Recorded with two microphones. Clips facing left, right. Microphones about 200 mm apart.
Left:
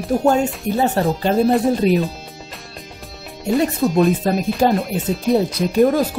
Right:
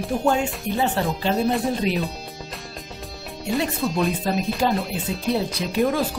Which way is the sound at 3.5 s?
40° left (ahead or behind).